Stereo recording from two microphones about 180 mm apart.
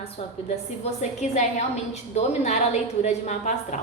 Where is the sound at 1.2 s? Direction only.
40° left (ahead or behind).